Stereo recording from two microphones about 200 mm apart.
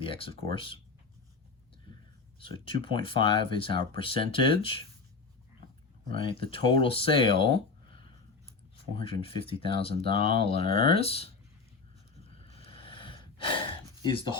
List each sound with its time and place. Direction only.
0.0 s speech: 25° left (ahead or behind)
2.4 s speech: 25° left (ahead or behind)
6.1 s speech: 25° left (ahead or behind)
12.5 s gasp: 30° left (ahead or behind)